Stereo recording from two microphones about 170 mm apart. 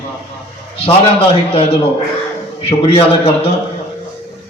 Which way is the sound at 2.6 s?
35° left (ahead or behind).